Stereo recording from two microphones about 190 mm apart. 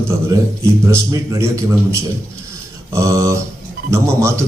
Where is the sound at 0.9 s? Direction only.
15° right (ahead or behind).